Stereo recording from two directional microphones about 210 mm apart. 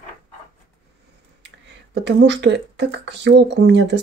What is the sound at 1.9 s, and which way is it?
Speech, 55° right (ahead or behind).